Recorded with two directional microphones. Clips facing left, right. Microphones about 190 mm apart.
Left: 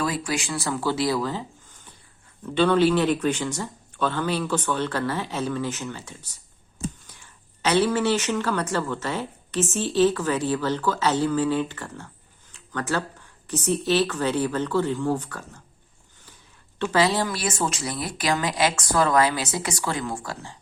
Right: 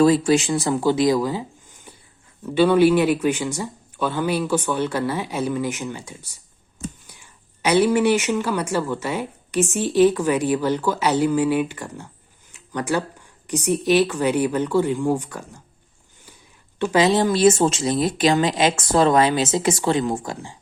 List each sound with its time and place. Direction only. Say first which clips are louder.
0.0 s speech: right 11 dB; 25° right (ahead or behind)
12.5 s a sound: right 4 dB; 15° right (ahead or behind)
13.5 s speech: right 4 dB; 15° right (ahead or behind)